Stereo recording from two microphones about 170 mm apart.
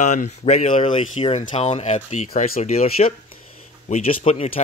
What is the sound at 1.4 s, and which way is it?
Speech, 45° left (ahead or behind).